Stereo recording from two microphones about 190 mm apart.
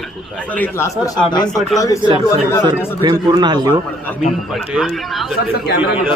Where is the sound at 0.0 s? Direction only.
5° left (ahead or behind).